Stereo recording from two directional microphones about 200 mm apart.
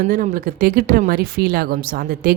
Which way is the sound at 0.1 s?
45° right (ahead or behind).